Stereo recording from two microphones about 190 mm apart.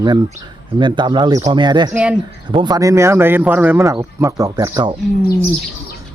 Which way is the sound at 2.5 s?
25° right (ahead or behind).